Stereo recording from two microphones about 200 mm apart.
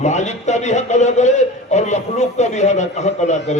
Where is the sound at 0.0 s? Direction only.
35° left (ahead or behind).